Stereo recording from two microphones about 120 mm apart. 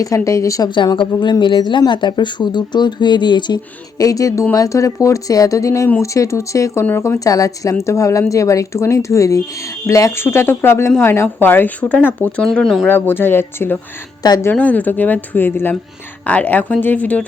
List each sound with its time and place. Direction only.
0.0 s a woman's voice: 25° left (ahead or behind)
0.7 s a woman's voice: 40° left (ahead or behind); by 12.9 s centre (ahead or behind)
12.9 s speech: 15° left (ahead or behind)
14.2 s speech: 35° left (ahead or behind)
14.5 s speech: 15° left (ahead or behind)